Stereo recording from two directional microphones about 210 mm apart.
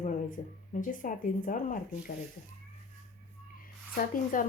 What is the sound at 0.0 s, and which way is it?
Speech, 35° left (ahead or behind).